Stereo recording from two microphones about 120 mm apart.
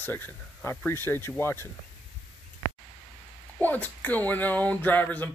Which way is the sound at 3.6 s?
15° left (ahead or behind).